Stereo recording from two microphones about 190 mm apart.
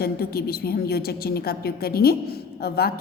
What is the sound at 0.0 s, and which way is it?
A woman's voice, 55° left (ahead or behind).